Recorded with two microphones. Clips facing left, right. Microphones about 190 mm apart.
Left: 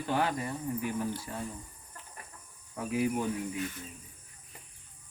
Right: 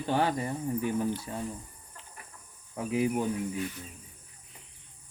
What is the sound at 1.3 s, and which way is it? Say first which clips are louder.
Speech: right 2 dB; 25° right (ahead or behind).